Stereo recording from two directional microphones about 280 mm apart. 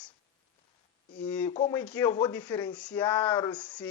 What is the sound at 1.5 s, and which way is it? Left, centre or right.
Speech, left.